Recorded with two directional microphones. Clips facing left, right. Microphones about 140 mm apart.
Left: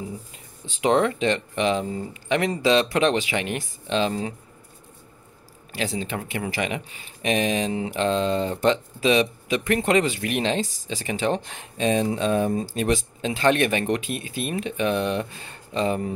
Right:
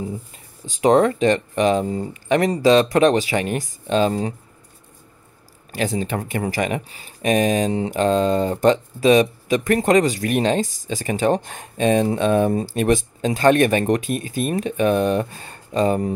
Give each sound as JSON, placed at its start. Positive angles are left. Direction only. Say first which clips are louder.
{"t": 0.7, "sound": "speech", "louder": "right 5 dB", "side_deg": -40}
{"t": 5.7, "sound": "speech", "louder": "right 5 dB", "side_deg": -45}